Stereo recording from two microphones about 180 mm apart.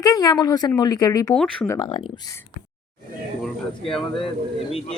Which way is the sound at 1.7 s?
25° left (ahead or behind).